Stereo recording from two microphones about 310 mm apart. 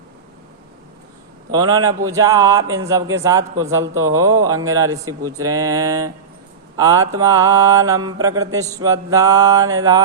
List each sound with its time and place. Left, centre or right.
1.5 s mantra: centre
3.5 s a man's voice: right
3.9 s mantra: centre